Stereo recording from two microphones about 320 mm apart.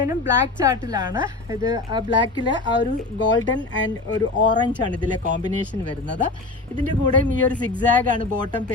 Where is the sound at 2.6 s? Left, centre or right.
Left.